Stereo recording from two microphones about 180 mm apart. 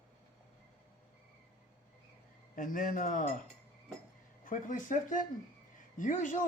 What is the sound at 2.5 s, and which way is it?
Speech, 50° left (ahead or behind).